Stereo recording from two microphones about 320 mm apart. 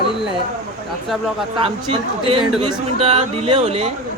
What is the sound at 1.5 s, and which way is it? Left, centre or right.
A man's voice, centre.